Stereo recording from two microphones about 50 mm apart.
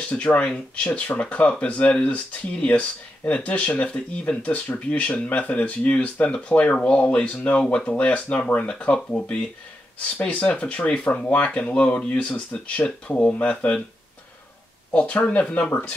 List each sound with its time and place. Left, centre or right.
0.1 s speech: left
14.9 s speech: left